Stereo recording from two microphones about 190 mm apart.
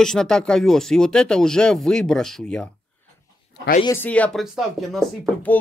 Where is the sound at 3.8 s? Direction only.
10° left (ahead or behind).